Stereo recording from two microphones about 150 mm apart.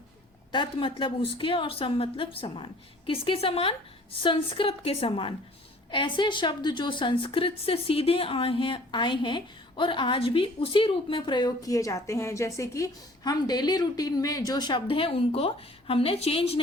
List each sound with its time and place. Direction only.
0.5 s a woman's voice: 35° left (ahead or behind)